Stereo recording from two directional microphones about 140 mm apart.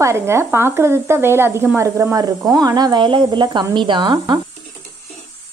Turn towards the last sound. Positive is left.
turn(degrees=-30)  # may be behind; listen again after turning